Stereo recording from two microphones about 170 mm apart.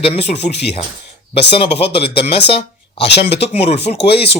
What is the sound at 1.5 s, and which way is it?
Speech, 35° left (ahead or behind).